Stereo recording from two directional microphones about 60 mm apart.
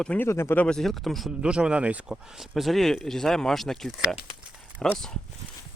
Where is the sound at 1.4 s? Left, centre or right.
Centre.